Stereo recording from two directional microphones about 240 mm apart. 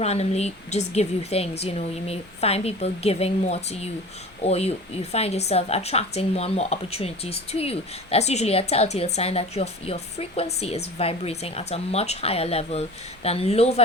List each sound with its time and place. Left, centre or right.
0.0 s speech: left